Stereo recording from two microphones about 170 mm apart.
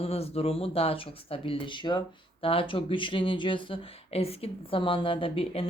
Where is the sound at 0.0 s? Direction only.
35° left (ahead or behind).